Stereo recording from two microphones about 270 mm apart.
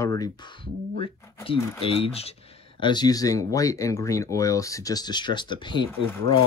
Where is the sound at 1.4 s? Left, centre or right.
Centre.